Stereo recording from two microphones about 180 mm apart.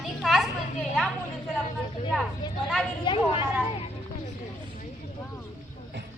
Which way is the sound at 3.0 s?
30° left (ahead or behind).